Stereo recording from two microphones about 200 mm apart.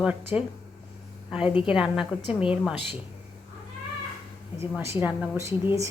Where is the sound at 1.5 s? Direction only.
25° left (ahead or behind).